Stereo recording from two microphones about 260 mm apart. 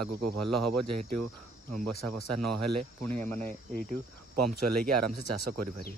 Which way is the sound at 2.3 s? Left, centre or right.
Right.